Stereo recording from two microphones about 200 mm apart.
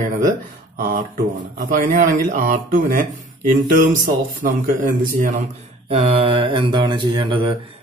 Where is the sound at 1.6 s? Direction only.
40° right (ahead or behind).